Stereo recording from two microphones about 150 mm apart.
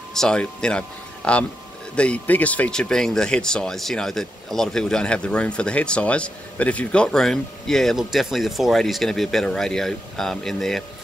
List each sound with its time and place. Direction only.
0.1 s speech: 5° left (ahead or behind)